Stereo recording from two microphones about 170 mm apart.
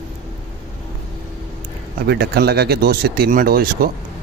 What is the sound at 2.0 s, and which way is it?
Speech, 70° right (ahead or behind).